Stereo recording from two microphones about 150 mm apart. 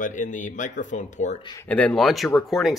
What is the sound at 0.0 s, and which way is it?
Speech, 60° left (ahead or behind).